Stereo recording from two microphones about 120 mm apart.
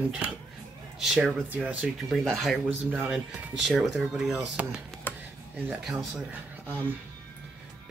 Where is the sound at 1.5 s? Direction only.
10° right (ahead or behind).